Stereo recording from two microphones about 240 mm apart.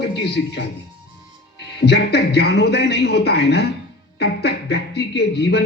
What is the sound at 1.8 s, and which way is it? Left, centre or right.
Speech, left.